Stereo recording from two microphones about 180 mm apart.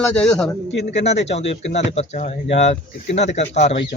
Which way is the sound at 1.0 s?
40° left (ahead or behind).